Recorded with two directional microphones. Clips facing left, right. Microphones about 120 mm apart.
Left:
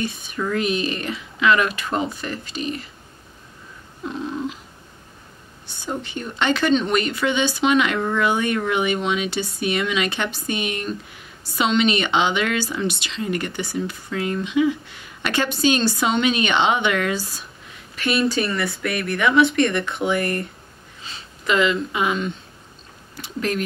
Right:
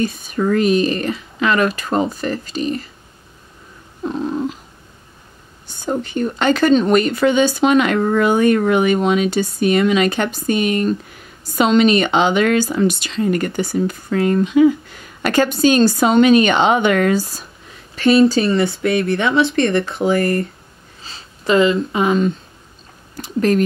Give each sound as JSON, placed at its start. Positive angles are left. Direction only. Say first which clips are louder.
{"t": 0.0, "sound": "speech", "louder": "right 7 dB", "side_deg": -40}
{"t": 4.0, "sound": "cat", "louder": "right 6 dB", "side_deg": -40}
{"t": 5.7, "sound": "speech", "louder": "right 7 dB", "side_deg": -45}
{"t": 17.9, "sound": "speech", "louder": "right 9 dB", "side_deg": -30}
{"t": 23.1, "sound": "a sound", "louder": "right 9 dB", "side_deg": -40}